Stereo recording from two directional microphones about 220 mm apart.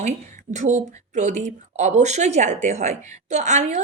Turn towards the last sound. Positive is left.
turn(degrees=-30)  # may be behind; listen again after turning